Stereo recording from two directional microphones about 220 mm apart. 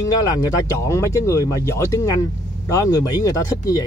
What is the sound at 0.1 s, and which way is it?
Speech, 15° left (ahead or behind).